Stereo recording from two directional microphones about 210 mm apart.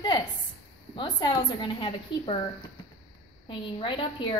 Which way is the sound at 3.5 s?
25° left (ahead or behind).